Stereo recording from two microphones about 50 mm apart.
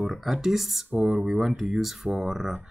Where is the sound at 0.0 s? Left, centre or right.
Centre.